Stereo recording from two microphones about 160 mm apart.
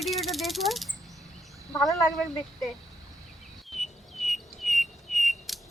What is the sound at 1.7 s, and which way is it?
Speech, centre (ahead or behind).